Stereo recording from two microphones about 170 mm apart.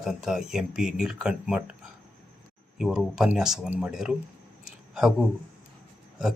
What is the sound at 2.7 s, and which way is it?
Speech, 5° right (ahead or behind).